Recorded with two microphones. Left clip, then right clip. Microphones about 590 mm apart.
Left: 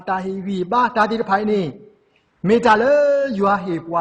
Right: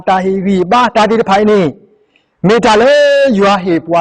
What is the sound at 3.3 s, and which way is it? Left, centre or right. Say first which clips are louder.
Speech: right 9 dB; right.